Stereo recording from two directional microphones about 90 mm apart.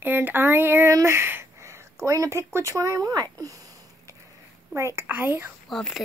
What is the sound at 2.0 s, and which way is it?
Speech, 35° right (ahead or behind).